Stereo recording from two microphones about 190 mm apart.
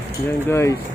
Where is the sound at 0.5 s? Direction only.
15° left (ahead or behind).